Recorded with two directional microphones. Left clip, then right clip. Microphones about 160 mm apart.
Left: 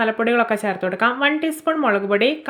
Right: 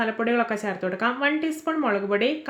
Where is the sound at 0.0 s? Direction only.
25° left (ahead or behind).